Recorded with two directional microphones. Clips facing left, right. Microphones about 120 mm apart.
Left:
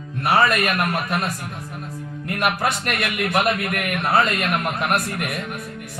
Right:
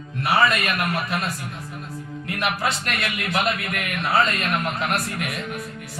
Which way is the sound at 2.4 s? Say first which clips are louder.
Left 3 dB; 50° left (ahead or behind).